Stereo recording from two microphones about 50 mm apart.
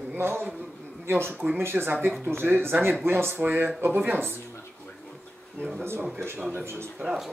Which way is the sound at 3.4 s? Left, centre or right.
Right.